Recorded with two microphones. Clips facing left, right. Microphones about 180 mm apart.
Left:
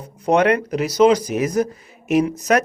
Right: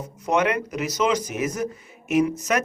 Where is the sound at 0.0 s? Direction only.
35° left (ahead or behind).